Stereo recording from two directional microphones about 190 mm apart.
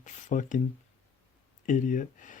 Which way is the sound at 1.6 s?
45° left (ahead or behind).